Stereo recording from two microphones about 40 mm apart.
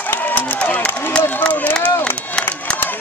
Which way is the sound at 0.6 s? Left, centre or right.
Left.